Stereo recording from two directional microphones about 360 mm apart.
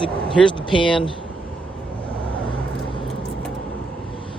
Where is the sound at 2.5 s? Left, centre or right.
Centre.